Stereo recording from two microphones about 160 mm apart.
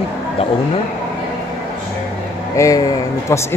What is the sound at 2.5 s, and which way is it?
Speech, 20° left (ahead or behind).